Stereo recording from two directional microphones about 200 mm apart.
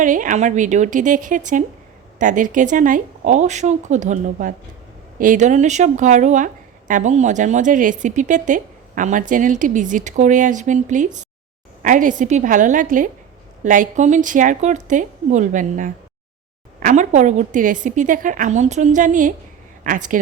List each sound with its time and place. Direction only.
0.0 s a woman's voice: 40° right (ahead or behind)